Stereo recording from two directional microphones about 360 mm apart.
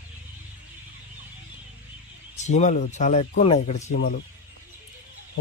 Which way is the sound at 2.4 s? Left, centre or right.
Centre.